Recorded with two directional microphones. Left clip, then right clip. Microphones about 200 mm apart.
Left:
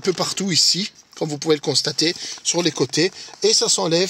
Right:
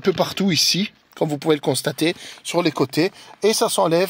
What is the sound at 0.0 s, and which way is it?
Speech, 45° right (ahead or behind).